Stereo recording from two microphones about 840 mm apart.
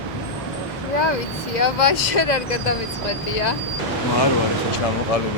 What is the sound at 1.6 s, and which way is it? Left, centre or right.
Speech, left.